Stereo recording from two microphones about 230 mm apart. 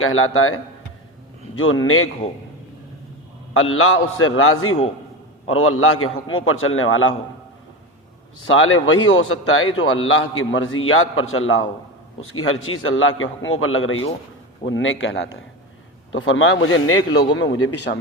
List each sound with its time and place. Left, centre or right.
0.0 s a man's voice: left
3.5 s a man's voice: left
8.4 s a man's voice: left
17.3 s speech: left